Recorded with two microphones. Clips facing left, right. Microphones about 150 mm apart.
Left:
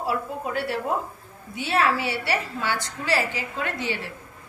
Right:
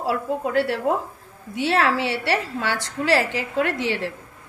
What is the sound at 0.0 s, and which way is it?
A woman's voice, 85° right.